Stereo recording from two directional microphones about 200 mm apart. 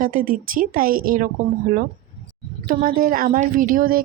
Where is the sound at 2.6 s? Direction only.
45° right (ahead or behind).